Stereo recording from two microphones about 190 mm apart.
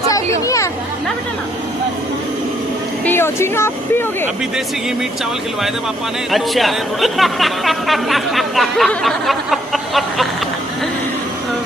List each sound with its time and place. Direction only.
0.1 s a sound: 15° left (ahead or behind)
3.0 s speech: 10° left (ahead or behind)
6.3 s speech: centre (ahead or behind)